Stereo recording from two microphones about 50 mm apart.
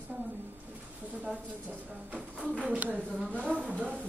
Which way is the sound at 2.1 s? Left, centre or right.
Centre.